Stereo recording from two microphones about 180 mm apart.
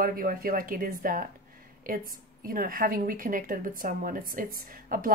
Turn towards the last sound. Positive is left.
turn(degrees=-50)  # may be behind; listen again after turning